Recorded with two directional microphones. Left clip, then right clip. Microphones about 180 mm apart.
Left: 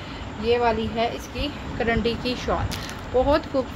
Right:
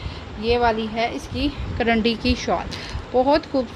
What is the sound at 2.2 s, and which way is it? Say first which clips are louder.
Speech: right 3 dB; 30° right (ahead or behind).